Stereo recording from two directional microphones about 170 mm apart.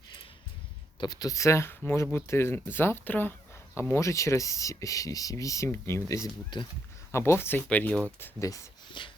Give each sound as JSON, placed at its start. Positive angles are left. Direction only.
{"t": 0.9, "sound": "speech", "side_deg": 25}